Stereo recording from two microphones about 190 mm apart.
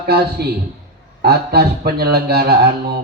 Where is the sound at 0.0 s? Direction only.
55° right (ahead or behind).